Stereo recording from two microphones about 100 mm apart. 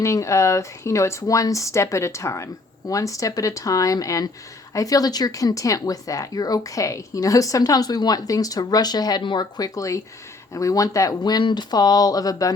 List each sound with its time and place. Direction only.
0.0 s speech: 30° left (ahead or behind)